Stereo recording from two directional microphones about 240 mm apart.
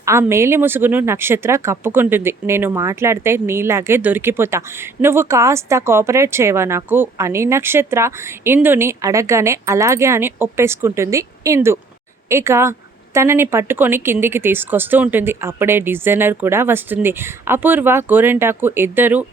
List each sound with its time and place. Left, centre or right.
0.0 s speech: centre